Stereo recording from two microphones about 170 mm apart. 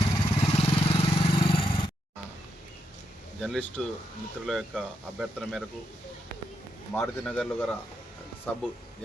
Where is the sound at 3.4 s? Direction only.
5° left (ahead or behind).